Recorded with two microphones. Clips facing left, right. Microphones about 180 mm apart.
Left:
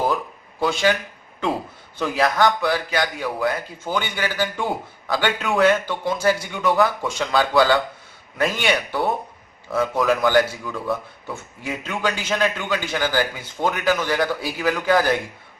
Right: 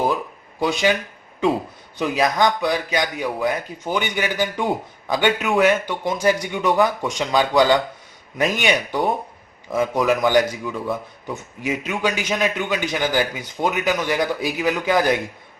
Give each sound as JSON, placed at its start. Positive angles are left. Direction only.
{"t": 0.6, "sound": "a man's voice", "side_deg": -15}
{"t": 2.0, "sound": "a man's voice", "side_deg": -15}